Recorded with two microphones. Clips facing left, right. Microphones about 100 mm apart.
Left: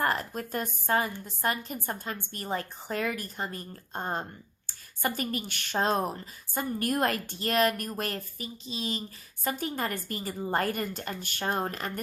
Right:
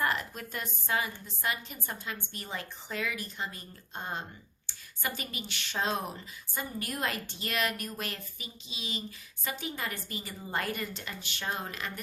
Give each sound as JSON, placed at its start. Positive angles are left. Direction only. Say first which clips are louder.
{"t": 0.0, "sound": "a woman's voice", "louder": "left 3 dB", "side_deg": 40}